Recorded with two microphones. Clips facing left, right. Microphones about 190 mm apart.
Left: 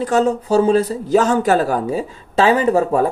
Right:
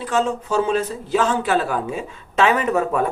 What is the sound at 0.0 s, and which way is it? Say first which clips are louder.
Speech: left 5 dB; 40° left (ahead or behind).